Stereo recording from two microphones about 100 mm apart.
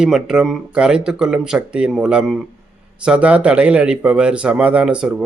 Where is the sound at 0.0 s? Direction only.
5° right (ahead or behind).